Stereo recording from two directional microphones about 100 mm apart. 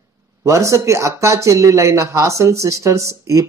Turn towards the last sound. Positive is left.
turn(degrees=-30)  # may be behind; listen again after turning